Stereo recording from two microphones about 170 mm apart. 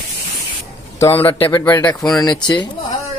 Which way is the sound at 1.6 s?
10° left (ahead or behind).